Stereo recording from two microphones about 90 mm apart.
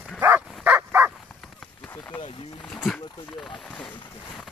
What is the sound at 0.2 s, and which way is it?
Dog, 25° right (ahead or behind).